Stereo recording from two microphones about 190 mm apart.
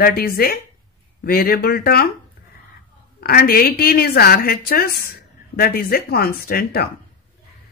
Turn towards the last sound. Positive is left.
turn(degrees=55)  # may be behind; listen again after turning